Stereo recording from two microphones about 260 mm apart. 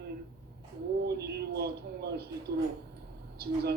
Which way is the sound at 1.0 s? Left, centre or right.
Right.